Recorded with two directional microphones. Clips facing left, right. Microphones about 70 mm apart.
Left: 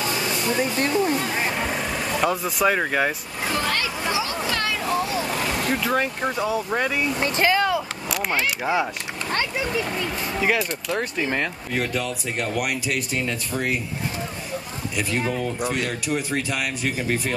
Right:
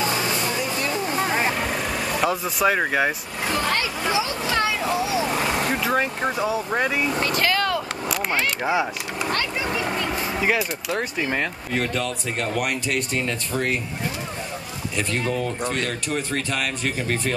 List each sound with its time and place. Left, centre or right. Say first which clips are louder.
0.1 s hair dryer: even; centre
1.1 s vehicle: right 2 dB; right
1.5 s speech: right 1 dB; centre
3.7 s vehicle: right 2 dB; right
5.8 s speech: right 1 dB; centre
7.2 s vehicle: left 5 dB; left
8.1 s speech: even; centre
9.6 s vehicle: even; centre
10.1 s speech: left 1 dB; centre
15.0 s speech: even; centre